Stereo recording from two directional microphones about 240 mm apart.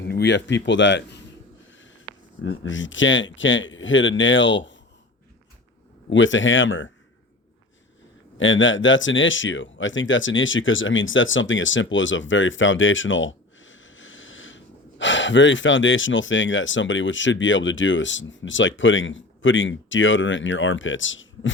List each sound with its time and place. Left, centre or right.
0.0 s speech: left
2.4 s speech: left
6.1 s speech: left
8.4 s speech: left